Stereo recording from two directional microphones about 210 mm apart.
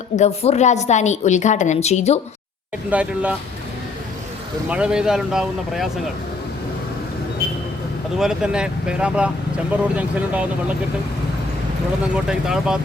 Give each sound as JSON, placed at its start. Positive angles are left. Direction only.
{"t": 0.2, "sound": "a woman's voice", "side_deg": 30}
{"t": 2.9, "sound": "speech", "side_deg": -5}
{"t": 4.7, "sound": "speech", "side_deg": -5}
{"t": 8.2, "sound": "speech", "side_deg": -5}
{"t": 12.1, "sound": "speech", "side_deg": -5}